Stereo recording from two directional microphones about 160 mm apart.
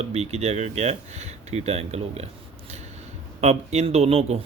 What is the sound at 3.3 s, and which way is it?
Speech, 40° right (ahead or behind).